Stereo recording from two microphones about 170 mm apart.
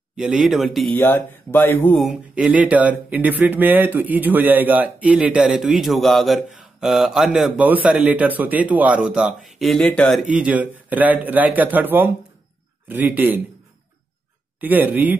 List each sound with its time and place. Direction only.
0.1 s speech: 5° right (ahead or behind)
0.9 s speech: 10° left (ahead or behind)
2.0 s speech: 5° right (ahead or behind)
10.2 s speech: 5° right (ahead or behind)
14.6 s speech: 10° right (ahead or behind)